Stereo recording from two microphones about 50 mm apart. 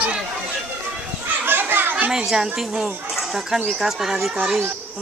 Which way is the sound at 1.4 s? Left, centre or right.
Right.